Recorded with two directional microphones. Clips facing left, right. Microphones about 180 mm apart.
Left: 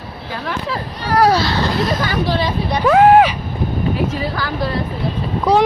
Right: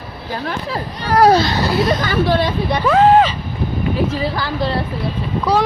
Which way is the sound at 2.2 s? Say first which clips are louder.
Right 5 dB; 55° right (ahead or behind).